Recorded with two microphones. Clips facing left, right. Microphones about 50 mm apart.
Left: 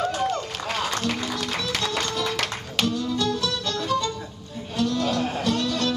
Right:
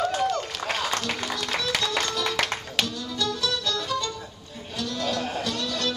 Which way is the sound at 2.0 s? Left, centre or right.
Centre.